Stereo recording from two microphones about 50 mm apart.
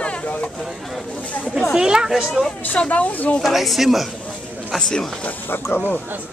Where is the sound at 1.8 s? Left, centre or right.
Centre.